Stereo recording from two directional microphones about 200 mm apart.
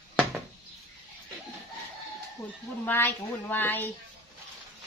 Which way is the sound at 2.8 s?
10° left (ahead or behind).